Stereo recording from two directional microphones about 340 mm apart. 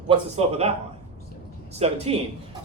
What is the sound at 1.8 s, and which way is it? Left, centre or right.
Speech, centre.